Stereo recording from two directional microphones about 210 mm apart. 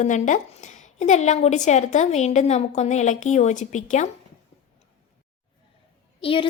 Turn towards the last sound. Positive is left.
turn(degrees=25)  # may be behind; listen again after turning